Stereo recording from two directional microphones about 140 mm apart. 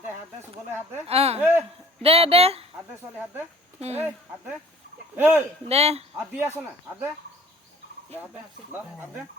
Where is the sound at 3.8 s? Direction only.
50° right (ahead or behind).